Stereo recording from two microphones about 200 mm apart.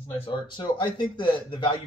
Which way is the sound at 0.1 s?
25° left (ahead or behind).